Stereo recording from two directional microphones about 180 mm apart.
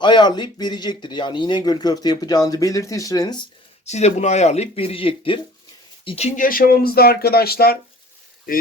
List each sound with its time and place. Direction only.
0.0 s speech: 25° left (ahead or behind)
3.8 s speech: 40° left (ahead or behind); by 7.8 s 60° left (ahead or behind)